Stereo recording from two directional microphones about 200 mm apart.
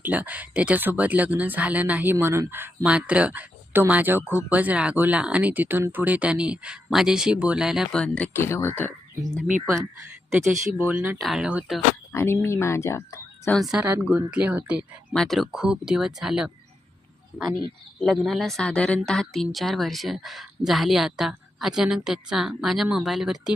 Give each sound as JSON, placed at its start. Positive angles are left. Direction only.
{"t": 0.0, "sound": "a woman's voice", "side_deg": -10}
{"t": 10.5, "sound": "speech", "side_deg": -40}
{"t": 10.8, "sound": "speech", "side_deg": -10}
{"t": 12.1, "sound": "speech", "side_deg": 10}
{"t": 13.6, "sound": "a woman's voice", "side_deg": -5}
{"t": 18.0, "sound": "a woman's voice", "side_deg": 0}